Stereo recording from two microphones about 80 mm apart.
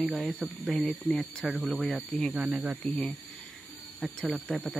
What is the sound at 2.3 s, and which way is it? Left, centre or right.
Speech, centre.